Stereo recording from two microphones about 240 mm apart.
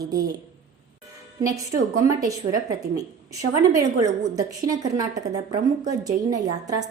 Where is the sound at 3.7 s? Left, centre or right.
Centre.